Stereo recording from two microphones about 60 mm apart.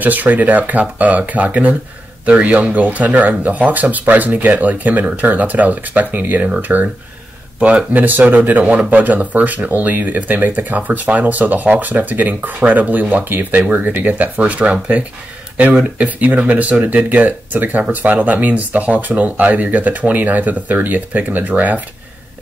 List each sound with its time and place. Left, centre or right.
0.0 s speech: right
7.9 s speech: right